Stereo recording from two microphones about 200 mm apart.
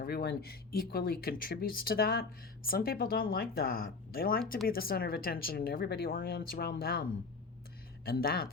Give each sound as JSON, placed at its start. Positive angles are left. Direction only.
{"t": 0.0, "sound": "speech", "side_deg": 50}
{"t": 8.0, "sound": "speech", "side_deg": 50}